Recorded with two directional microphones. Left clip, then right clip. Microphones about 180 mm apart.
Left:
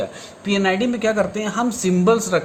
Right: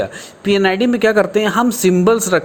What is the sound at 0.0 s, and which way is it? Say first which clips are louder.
Speech: right 6 dB; 45° right (ahead or behind).